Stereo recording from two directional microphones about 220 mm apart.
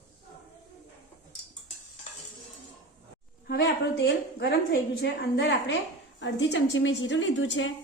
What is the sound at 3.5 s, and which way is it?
A woman's voice, 50° left (ahead or behind).